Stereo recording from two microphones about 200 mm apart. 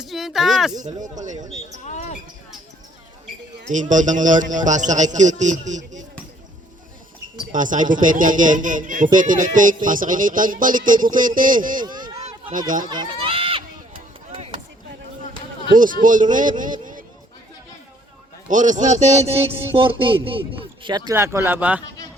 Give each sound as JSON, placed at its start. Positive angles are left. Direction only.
{"t": 0.0, "sound": "speech", "side_deg": 0}
{"t": 1.0, "sound": "a man's voice", "side_deg": -40}
{"t": 1.8, "sound": "speech", "side_deg": 35}
{"t": 3.7, "sound": "a man's voice", "side_deg": -40}
{"t": 7.5, "sound": "a man's voice", "side_deg": -40}
{"t": 11.8, "sound": "run", "side_deg": -20}
{"t": 12.5, "sound": "a man's voice", "side_deg": -40}
{"t": 12.9, "sound": "chop", "side_deg": -20}
{"t": 15.7, "sound": "speech", "side_deg": -40}
{"t": 18.4, "sound": "speech", "side_deg": -40}